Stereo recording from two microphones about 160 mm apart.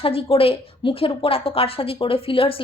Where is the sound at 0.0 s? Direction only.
35° left (ahead or behind).